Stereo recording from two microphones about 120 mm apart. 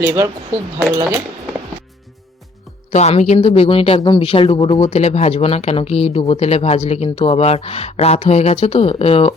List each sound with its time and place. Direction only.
0.0 s speech: 20° right (ahead or behind)
2.9 s speech: 70° left (ahead or behind)